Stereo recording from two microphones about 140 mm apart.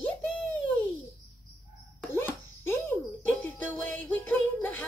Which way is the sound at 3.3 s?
10° left (ahead or behind).